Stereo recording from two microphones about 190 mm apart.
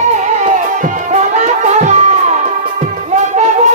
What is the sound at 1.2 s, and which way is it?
Music, 40° right (ahead or behind).